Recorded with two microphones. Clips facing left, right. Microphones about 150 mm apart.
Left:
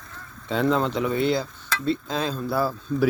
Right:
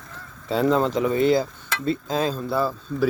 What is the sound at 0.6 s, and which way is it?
Speech, 5° right (ahead or behind).